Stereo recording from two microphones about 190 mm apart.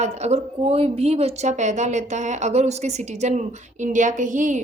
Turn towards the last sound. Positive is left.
turn(degrees=-40)  # may be behind; listen again after turning